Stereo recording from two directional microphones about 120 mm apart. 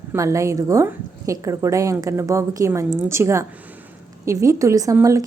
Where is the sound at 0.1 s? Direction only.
25° right (ahead or behind).